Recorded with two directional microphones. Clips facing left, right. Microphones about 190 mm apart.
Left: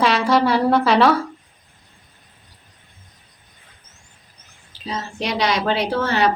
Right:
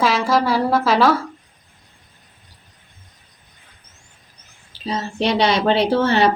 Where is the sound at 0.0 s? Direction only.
Centre (ahead or behind).